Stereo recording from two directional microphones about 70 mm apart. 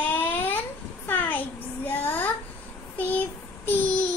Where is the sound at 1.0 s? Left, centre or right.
Left.